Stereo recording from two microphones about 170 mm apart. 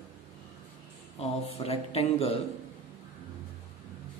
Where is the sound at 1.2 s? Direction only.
35° left (ahead or behind).